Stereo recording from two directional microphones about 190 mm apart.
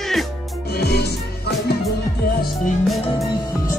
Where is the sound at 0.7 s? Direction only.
60° left (ahead or behind).